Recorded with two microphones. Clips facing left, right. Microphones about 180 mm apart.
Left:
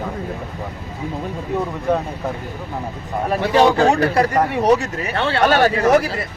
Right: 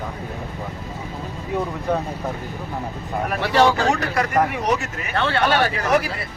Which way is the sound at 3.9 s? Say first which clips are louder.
Left 4 dB; 30° left (ahead or behind).